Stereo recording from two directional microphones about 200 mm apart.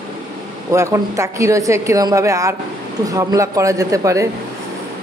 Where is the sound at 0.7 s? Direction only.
15° right (ahead or behind).